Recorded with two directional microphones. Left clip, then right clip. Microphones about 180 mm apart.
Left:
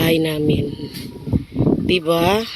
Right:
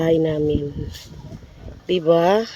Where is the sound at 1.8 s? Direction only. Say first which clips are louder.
Right 3 dB; 5° left (ahead or behind).